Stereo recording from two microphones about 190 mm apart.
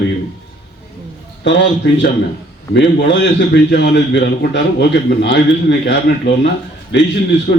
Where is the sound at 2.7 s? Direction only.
65° left (ahead or behind).